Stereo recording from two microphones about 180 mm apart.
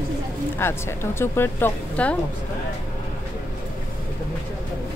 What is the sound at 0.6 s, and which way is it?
A woman's voice, 15° left (ahead or behind).